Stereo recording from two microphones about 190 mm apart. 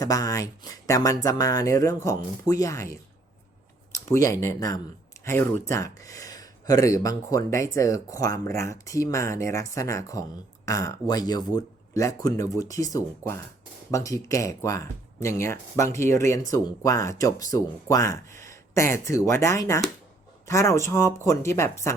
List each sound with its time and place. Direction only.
0.0 s speech: 20° left (ahead or behind)